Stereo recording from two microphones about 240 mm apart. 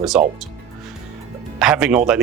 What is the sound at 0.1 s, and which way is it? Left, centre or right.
Speech, centre.